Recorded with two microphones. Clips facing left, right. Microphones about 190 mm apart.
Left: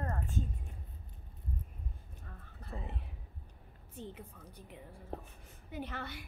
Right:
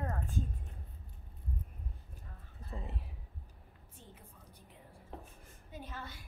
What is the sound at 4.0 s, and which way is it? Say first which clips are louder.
Speech: left 12 dB; 70° left (ahead or behind).